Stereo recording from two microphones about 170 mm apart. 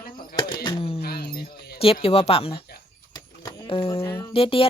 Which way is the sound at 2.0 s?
35° left (ahead or behind).